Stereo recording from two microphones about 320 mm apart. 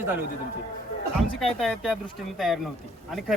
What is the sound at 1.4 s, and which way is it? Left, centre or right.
Speech, centre.